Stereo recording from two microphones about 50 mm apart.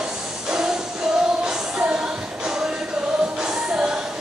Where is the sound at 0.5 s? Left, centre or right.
Centre.